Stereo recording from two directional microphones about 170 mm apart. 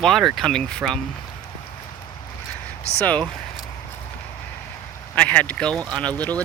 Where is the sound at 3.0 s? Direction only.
10° left (ahead or behind).